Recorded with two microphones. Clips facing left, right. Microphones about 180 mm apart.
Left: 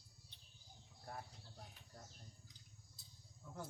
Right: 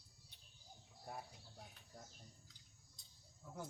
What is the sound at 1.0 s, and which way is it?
Bird, 10° right (ahead or behind).